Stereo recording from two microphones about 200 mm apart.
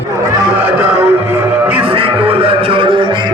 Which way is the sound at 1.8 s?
25° right (ahead or behind).